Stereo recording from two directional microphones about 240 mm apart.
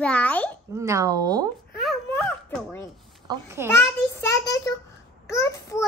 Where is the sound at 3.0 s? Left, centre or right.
Centre.